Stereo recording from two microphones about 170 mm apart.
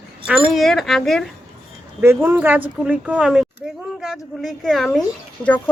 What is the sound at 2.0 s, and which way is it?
A woman's voice, 15° right (ahead or behind).